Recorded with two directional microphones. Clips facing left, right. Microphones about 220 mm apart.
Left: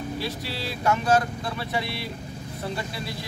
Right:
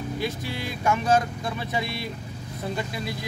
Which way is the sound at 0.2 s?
20° right (ahead or behind).